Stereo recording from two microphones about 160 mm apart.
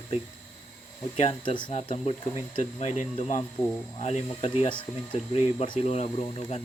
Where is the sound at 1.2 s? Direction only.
30° left (ahead or behind).